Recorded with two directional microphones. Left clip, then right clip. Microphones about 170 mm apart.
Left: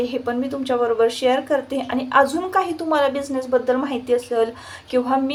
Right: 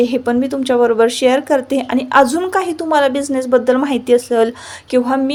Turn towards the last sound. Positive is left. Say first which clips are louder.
# right 5 dB
turn(degrees=-45)  # may be behind; listen again after turning